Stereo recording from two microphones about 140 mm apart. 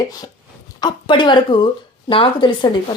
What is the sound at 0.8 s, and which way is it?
Speech, 35° left (ahead or behind).